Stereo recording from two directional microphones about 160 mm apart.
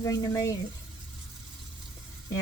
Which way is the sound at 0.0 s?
20° left (ahead or behind).